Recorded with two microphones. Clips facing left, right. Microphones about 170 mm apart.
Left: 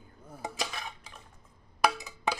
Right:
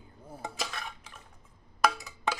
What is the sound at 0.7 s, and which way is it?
Dishes, 10° left (ahead or behind).